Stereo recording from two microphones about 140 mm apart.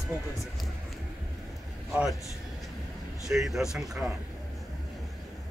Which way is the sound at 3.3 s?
Centre (ahead or behind).